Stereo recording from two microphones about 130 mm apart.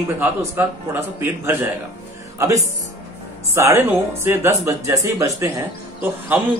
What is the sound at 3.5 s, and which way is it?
Speech, 20° right (ahead or behind).